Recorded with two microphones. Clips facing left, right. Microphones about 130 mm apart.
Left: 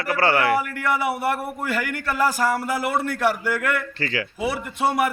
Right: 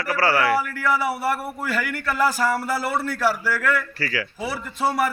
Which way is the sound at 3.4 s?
20° left (ahead or behind).